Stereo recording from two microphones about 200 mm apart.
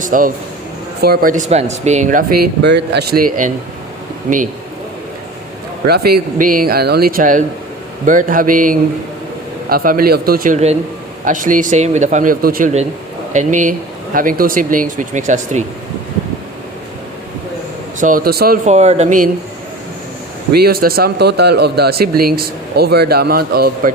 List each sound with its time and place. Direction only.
0.0 s speech: 45° right (ahead or behind)
5.9 s speech: 50° right (ahead or behind)
18.0 s speech: 45° right (ahead or behind)
18.6 s speech: 35° right (ahead or behind)
20.6 s speech: 50° right (ahead or behind)